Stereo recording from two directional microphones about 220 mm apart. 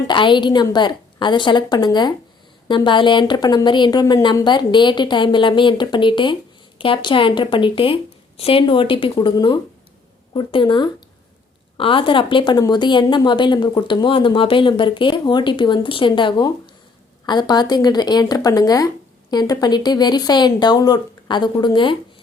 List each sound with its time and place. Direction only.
0.1 s a woman's voice: 20° left (ahead or behind)